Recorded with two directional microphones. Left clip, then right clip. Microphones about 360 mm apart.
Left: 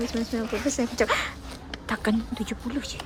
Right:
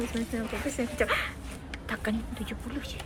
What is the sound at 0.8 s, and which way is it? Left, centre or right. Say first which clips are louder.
A woman's voice: left 2 dB; left.